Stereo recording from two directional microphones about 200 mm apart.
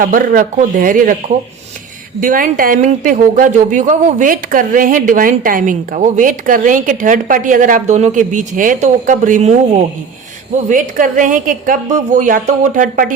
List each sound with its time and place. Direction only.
0.0 s speech: 40° right (ahead or behind)
2.2 s speech: 45° right (ahead or behind)